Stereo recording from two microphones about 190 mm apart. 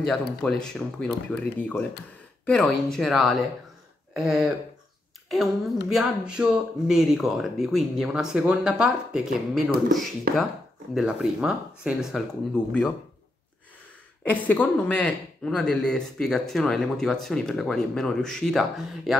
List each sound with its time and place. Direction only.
0.0 s speech: centre (ahead or behind)
10.3 s speech: 55° right (ahead or behind)
11.0 s speech: centre (ahead or behind)
14.2 s speech: 10° left (ahead or behind)